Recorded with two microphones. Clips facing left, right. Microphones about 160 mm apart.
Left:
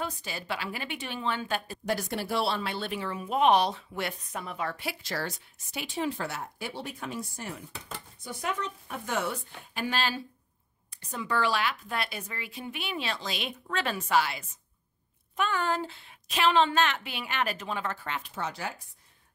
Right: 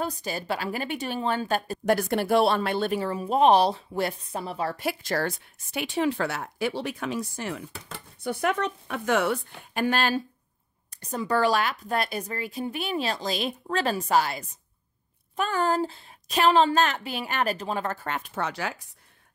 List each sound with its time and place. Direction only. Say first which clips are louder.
0.0 s a woman's voice: right 5 dB; 40° right (ahead or behind); by 7.6 s 90° right
8.2 s speech: right 8 dB; 65° right (ahead or behind)
10.9 s speech: right 6 dB; 40° right (ahead or behind); by 18.8 s 85° right